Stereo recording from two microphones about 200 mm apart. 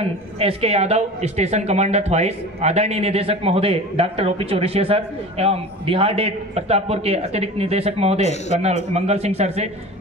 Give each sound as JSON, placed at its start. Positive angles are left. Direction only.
{"t": 0.0, "sound": "speech", "side_deg": -30}